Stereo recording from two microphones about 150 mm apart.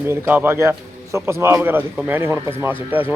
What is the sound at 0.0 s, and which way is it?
A man's voice, 15° right (ahead or behind).